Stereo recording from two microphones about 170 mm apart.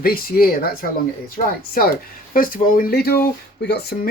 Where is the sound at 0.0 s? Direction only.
60° left (ahead or behind).